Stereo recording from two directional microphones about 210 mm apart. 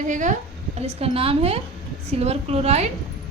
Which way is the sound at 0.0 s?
35° right (ahead or behind).